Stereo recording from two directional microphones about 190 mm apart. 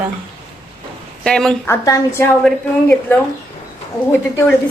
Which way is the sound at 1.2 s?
5° left (ahead or behind).